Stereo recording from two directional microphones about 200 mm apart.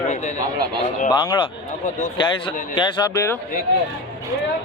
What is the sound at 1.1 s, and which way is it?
Speech, 20° left (ahead or behind).